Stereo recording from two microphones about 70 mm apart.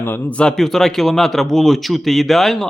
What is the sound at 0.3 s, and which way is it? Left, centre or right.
A man's voice, centre.